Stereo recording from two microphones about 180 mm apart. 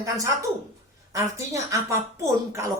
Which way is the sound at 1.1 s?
15° right (ahead or behind).